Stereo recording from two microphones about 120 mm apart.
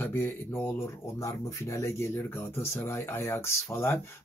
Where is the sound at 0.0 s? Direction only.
20° left (ahead or behind).